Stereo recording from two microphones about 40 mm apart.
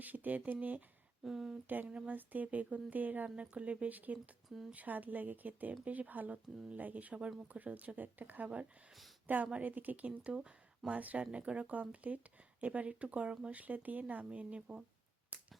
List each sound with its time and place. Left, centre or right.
0.0 s speech: right
1.2 s speech: centre
1.6 s a woman's voice: right
3.2 s speech: right
4.4 s speech: centre
4.7 s a woman's voice: right
10.1 s speech: right
10.9 s a woman's voice: right
11.2 s a woman's voice: right
14.3 s speech: right
15.3 s a sound: right